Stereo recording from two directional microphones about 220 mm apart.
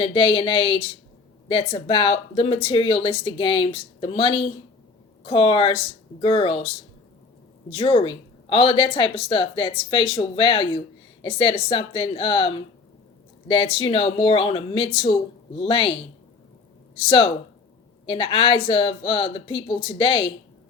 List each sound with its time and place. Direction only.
0.0 s a woman's voice: 25° left (ahead or behind)
17.0 s a woman's voice: 25° left (ahead or behind)